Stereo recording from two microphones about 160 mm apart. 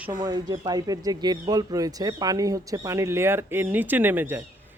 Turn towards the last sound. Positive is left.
turn(degrees=-15)  # may be behind; listen again after turning